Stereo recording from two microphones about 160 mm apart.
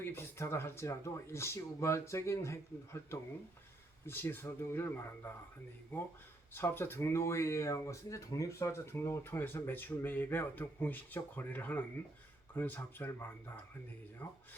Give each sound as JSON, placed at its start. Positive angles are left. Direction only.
{"t": 0.0, "sound": "speech", "side_deg": 15}